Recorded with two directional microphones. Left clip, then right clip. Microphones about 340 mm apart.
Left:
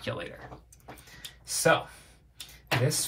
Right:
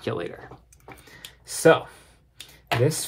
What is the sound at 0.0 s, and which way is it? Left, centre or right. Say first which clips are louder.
Speech: right 6 dB; right.